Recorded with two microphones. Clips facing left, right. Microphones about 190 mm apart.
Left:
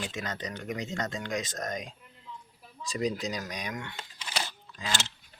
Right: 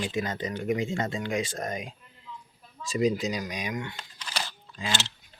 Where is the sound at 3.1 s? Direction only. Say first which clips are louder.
Right 4 dB; 5° right (ahead or behind).